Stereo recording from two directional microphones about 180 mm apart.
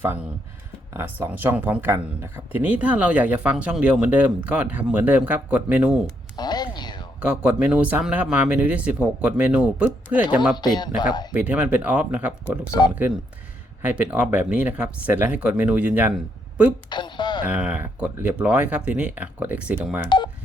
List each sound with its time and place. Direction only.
0.9 s speech: 10° right (ahead or behind)
6.3 s a sound: 25° left (ahead or behind)
7.2 s speech: 5° right (ahead or behind)
10.5 s speech: 25° left (ahead or behind)
11.3 s speech: 10° right (ahead or behind)
13.8 s speech: 10° right (ahead or behind)
16.9 s a sound: 25° left (ahead or behind)
17.4 s speech: 5° right (ahead or behind)
20.1 s speech: 25° left (ahead or behind)